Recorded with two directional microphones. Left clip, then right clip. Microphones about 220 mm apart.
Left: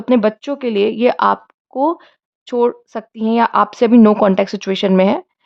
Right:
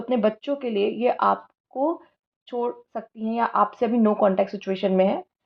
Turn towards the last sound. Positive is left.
turn(degrees=35)  # may be behind; listen again after turning